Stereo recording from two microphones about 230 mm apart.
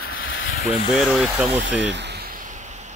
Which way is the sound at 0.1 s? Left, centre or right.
Left.